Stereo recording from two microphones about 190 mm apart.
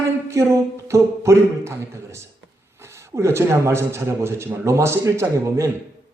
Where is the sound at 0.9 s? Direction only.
15° right (ahead or behind).